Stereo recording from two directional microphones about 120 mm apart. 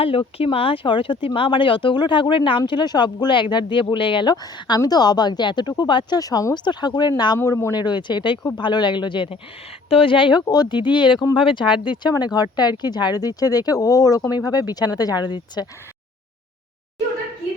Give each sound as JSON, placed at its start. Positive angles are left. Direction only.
{"t": 0.0, "sound": "speech", "side_deg": 50}
{"t": 7.3, "sound": "speech", "side_deg": 25}
{"t": 10.4, "sound": "speech", "side_deg": 35}